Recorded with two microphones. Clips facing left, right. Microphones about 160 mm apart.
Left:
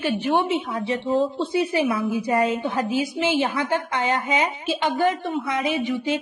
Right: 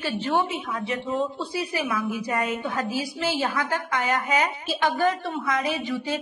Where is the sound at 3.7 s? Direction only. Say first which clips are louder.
Left 3 dB; 30° left (ahead or behind).